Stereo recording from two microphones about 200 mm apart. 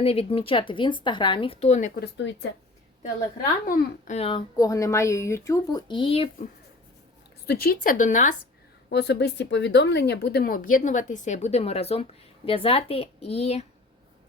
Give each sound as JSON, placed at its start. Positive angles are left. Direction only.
{"t": 0.0, "sound": "a child's voice", "side_deg": 30}
{"t": 2.0, "sound": "speech", "side_deg": 60}
{"t": 3.7, "sound": "a child's voice", "side_deg": 40}
{"t": 7.4, "sound": "speech", "side_deg": 50}
{"t": 8.9, "sound": "a child's voice", "side_deg": 60}